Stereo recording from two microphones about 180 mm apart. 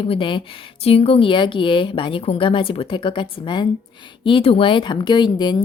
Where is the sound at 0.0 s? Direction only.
30° left (ahead or behind).